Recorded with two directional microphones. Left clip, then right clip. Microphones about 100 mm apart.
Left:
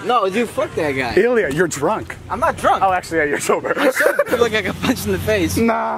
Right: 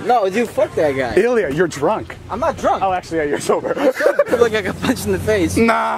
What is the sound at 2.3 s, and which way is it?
Speech, 45° left (ahead or behind).